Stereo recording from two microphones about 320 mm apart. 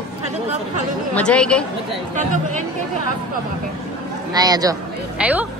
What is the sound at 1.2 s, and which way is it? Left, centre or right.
Speech, centre.